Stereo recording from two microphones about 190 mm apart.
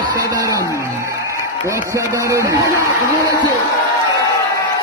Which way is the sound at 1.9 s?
15° right (ahead or behind).